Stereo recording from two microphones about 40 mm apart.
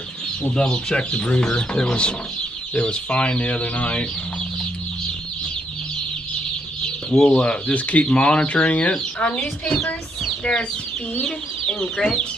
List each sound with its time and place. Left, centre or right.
0.5 s speech: centre
0.9 s speech: left
7.1 s speech: left
10.5 s speech: centre